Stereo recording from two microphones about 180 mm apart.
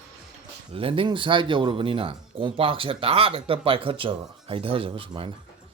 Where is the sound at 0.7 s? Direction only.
30° right (ahead or behind).